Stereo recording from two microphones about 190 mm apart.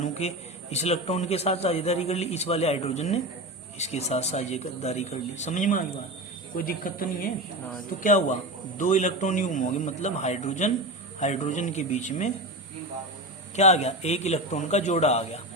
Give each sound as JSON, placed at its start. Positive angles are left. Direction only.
{"t": 0.0, "sound": "a man's voice", "side_deg": 35}
{"t": 13.6, "sound": "a man's voice", "side_deg": 35}